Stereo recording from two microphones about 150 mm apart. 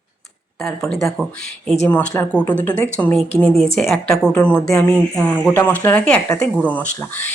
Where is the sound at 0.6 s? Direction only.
Centre (ahead or behind).